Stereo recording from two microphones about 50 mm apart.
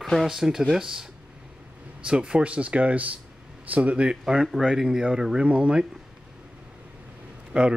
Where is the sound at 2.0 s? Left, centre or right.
Right.